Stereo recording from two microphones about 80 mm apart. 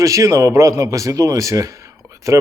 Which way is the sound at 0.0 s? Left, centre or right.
Right.